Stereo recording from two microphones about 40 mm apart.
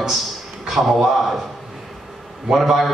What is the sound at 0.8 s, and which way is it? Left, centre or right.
Speech, right.